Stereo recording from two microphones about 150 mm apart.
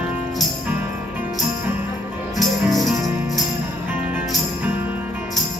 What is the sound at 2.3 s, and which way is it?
Music, centre (ahead or behind).